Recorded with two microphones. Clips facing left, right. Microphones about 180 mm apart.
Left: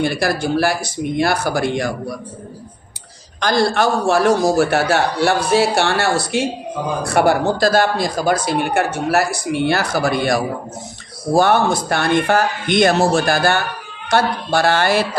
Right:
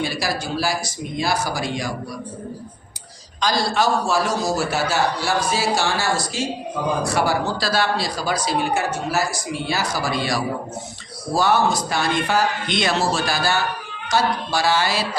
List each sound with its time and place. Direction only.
0.0 s speech: 55° left (ahead or behind)
3.4 s a man's voice: 55° left (ahead or behind)